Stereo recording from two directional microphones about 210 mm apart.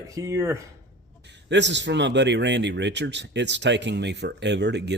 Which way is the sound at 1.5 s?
55° right (ahead or behind).